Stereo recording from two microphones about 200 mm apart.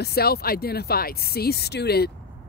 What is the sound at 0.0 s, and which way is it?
Speech, 50° left (ahead or behind).